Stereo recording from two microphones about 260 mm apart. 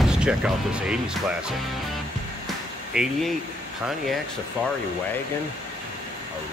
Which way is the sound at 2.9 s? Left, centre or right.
Centre.